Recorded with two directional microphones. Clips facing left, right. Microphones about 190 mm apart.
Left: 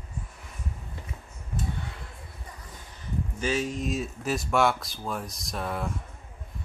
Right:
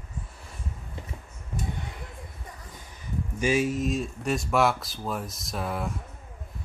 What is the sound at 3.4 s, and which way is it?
Speech, 10° right (ahead or behind).